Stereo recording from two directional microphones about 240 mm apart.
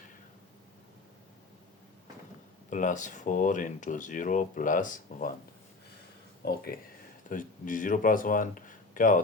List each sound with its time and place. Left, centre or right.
2.6 s speech: left
6.4 s speech: left